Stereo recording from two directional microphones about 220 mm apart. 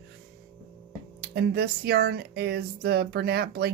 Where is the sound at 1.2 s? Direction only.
45° right (ahead or behind).